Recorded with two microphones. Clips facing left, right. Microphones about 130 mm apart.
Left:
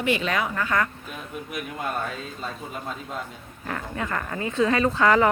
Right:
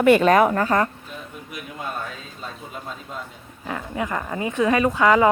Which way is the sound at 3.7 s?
15° right (ahead or behind).